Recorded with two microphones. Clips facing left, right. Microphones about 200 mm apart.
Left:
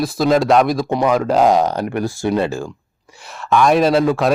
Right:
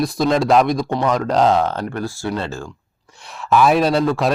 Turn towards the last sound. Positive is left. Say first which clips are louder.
# left 2 dB
turn(degrees=0)  # may be behind; listen again after turning